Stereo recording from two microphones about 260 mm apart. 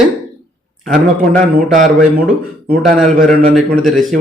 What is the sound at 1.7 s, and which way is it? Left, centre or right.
Speech, right.